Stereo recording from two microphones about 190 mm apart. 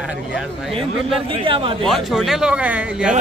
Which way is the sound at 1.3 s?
30° right (ahead or behind).